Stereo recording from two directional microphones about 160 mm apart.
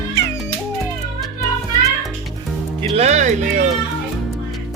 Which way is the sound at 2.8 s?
40° right (ahead or behind).